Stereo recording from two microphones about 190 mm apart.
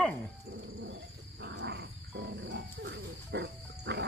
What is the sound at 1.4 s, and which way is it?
Wild animals, 60° right (ahead or behind).